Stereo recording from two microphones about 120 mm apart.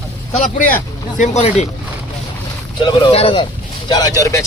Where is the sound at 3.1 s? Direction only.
50° left (ahead or behind).